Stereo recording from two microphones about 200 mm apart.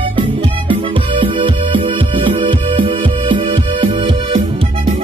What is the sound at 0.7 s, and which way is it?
Music, 25° right (ahead or behind).